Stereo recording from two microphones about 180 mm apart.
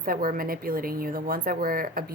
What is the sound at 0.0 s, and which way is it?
A woman's voice, 50° right (ahead or behind).